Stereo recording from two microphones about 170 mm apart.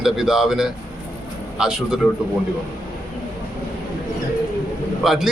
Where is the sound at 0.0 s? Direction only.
Centre (ahead or behind).